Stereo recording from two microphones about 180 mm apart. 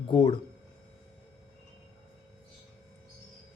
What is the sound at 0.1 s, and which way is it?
Speech, 25° left (ahead or behind).